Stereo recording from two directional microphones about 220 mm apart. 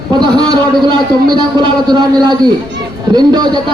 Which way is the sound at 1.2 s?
20° right (ahead or behind).